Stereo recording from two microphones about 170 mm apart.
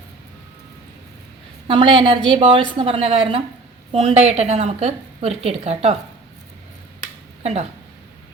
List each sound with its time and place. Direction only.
1.6 s a woman's voice: 30° right (ahead or behind)